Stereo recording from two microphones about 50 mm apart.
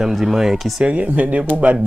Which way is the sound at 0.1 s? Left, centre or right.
Centre.